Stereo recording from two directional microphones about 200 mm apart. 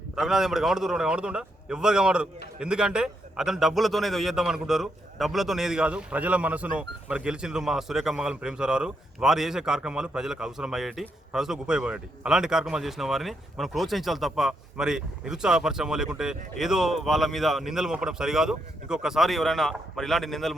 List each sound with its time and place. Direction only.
0.2 s a man's voice: centre (ahead or behind)